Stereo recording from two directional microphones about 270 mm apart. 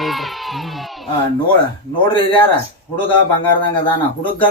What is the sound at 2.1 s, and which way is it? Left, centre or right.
Speech, centre.